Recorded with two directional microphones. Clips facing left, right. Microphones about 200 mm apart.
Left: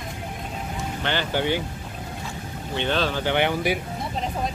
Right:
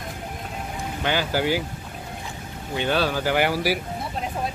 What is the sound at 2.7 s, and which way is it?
Speech, 10° right (ahead or behind).